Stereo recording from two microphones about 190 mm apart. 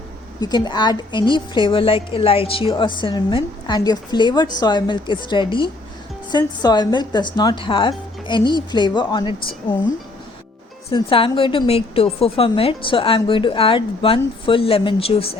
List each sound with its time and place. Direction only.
0.3 s a woman's voice: 20° left (ahead or behind)
10.9 s a woman's voice: 30° left (ahead or behind)